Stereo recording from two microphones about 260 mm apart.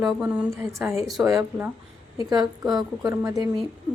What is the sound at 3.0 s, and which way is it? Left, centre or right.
Speech, centre.